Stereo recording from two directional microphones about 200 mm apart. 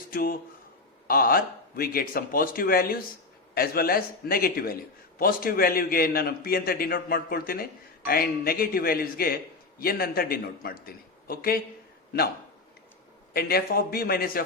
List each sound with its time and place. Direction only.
0.1 s a man's voice: 45° left (ahead or behind)
13.3 s a man's voice: 50° left (ahead or behind)